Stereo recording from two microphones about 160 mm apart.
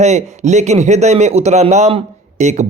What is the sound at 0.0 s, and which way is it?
A man's voice, 45° right (ahead or behind).